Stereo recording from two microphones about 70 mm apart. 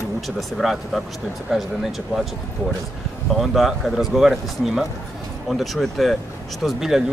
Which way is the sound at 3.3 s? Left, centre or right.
Centre.